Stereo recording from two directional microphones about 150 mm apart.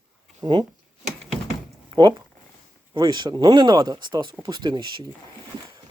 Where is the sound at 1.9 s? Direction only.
30° right (ahead or behind).